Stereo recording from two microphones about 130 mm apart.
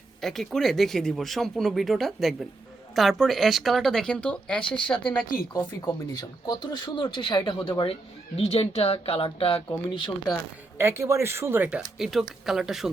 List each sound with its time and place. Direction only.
0.2 s speech: centre (ahead or behind)
6.1 s speech: 30° left (ahead or behind)
8.4 s speech: 50° left (ahead or behind)
10.8 s speech: 20° right (ahead or behind)
11.8 s speech: centre (ahead or behind)